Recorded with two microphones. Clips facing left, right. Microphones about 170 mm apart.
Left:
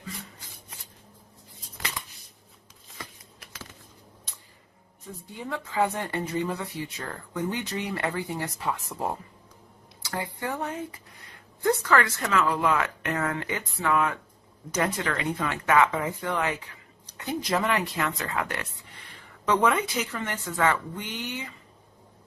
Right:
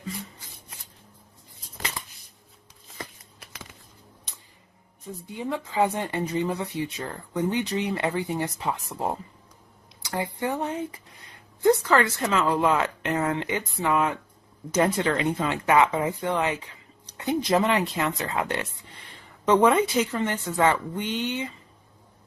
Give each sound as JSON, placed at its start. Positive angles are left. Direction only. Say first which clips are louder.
{"t": 5.0, "sound": "speech", "louder": "right 5 dB", "side_deg": -20}
{"t": 10.0, "sound": "a sound", "louder": "right 3 dB", "side_deg": -20}
{"t": 10.4, "sound": "speech", "louder": "right 4 dB", "side_deg": -20}